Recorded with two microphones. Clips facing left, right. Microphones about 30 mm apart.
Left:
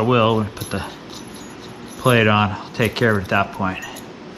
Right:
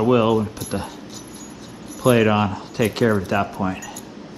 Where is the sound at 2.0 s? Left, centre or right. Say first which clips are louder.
Left 1 dB; left.